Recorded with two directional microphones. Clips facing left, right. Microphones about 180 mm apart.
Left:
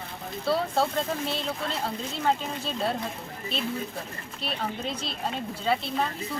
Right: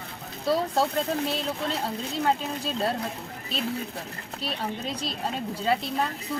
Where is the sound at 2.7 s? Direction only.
40° right (ahead or behind).